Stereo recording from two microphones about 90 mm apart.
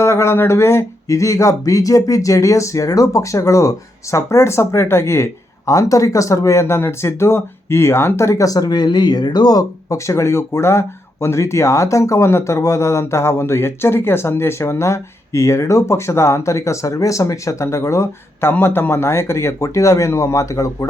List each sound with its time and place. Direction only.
0.0 s speech: 30° left (ahead or behind)